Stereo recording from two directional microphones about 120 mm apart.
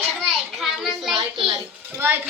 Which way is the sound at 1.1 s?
45° right (ahead or behind).